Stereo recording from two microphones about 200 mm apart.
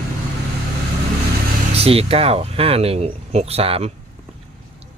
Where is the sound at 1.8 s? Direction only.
30° right (ahead or behind).